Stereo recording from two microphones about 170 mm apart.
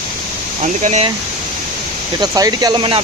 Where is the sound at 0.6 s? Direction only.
45° right (ahead or behind).